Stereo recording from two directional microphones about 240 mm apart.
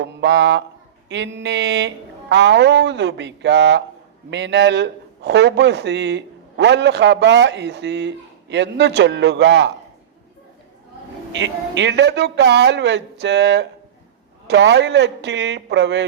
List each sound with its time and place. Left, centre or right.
0.0 s a man's voice: right
11.3 s a man's voice: right